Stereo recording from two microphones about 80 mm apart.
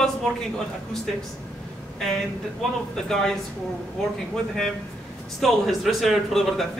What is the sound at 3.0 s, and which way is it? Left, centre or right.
Speech, centre.